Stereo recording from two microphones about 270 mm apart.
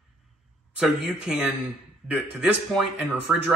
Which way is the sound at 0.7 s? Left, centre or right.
Centre.